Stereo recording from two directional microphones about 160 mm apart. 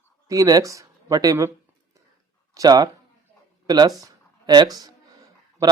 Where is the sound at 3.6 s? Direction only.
25° right (ahead or behind).